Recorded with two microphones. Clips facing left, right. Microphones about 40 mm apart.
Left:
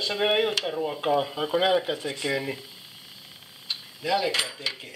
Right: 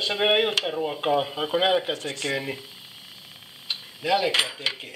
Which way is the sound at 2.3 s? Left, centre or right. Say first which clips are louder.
Even; centre.